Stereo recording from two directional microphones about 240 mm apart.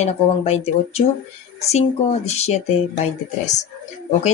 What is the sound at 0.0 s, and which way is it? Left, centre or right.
Speech, left.